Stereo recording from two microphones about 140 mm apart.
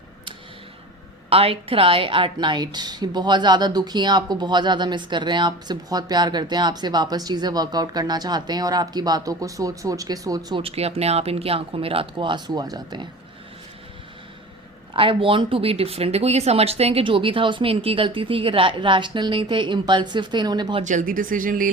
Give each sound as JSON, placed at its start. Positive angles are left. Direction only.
{"t": 1.3, "sound": "a woman's voice", "side_deg": -45}
{"t": 10.6, "sound": "a woman's voice", "side_deg": -45}
{"t": 14.9, "sound": "a woman's voice", "side_deg": -40}
{"t": 20.8, "sound": "speech", "side_deg": -65}